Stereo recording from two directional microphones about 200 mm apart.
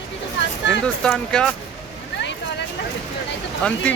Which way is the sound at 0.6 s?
65° left (ahead or behind).